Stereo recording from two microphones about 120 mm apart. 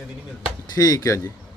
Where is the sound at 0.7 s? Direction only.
30° left (ahead or behind).